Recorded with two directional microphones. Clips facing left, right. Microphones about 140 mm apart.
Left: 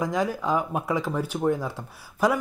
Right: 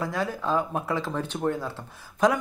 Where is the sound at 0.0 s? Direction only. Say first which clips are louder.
Left 3 dB; 15° left (ahead or behind).